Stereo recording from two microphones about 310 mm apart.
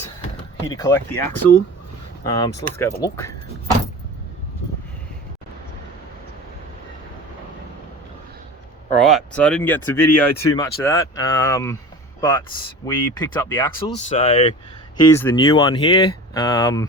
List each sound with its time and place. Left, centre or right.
0.7 s speech: centre
9.0 s speech: centre